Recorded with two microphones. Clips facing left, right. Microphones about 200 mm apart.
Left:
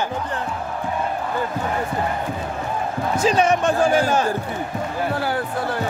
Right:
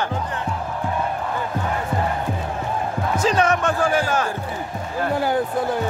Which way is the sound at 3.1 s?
10° left (ahead or behind).